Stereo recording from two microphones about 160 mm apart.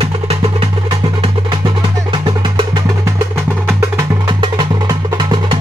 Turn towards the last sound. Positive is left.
turn(degrees=-25)  # may be behind; listen again after turning